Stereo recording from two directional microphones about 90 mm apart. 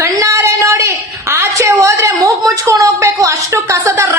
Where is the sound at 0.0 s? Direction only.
35° right (ahead or behind).